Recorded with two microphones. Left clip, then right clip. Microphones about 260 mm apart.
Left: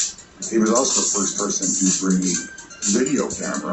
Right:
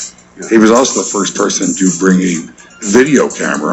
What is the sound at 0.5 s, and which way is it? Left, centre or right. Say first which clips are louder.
Speech: right 11 dB; right.